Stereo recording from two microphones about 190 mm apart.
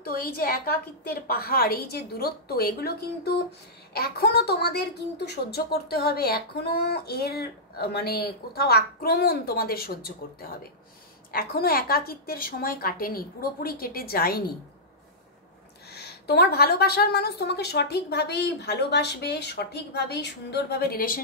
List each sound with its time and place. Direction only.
0.0 s a woman's voice: 50° left (ahead or behind)
11.3 s a woman's voice: 50° left (ahead or behind)
15.9 s a woman's voice: 60° left (ahead or behind)